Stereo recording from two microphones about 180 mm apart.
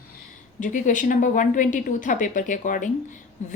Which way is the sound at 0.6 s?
45° left (ahead or behind).